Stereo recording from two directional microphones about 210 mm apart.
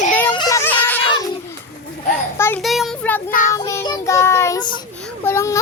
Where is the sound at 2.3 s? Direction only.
10° left (ahead or behind).